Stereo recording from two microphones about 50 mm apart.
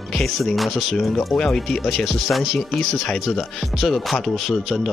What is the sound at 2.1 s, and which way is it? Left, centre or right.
Speech, centre.